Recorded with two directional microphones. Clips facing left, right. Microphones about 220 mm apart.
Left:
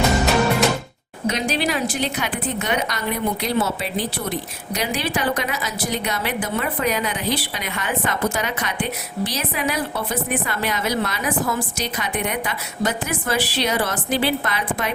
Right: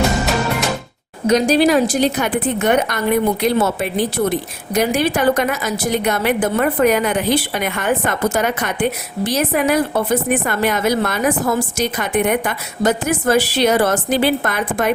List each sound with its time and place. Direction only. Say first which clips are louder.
1.3 s a woman's voice: right 10 dB; 40° right (ahead or behind)